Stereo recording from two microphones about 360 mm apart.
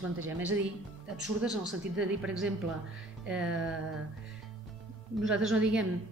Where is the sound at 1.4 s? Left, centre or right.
Centre.